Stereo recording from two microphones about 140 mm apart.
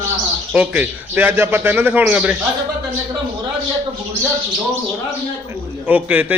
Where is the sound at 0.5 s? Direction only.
10° right (ahead or behind).